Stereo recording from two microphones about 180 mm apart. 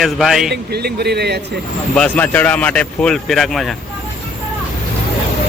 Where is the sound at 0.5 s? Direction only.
65° right (ahead or behind).